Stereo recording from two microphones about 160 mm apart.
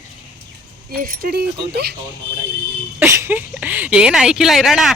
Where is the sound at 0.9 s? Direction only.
65° right (ahead or behind); by 1.9 s 85° right.